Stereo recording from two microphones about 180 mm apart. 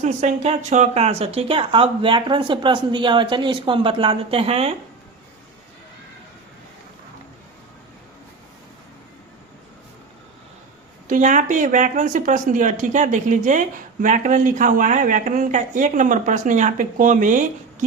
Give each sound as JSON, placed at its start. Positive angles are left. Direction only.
{"t": 0.0, "sound": "speech", "side_deg": -40}
{"t": 11.1, "sound": "speech", "side_deg": -45}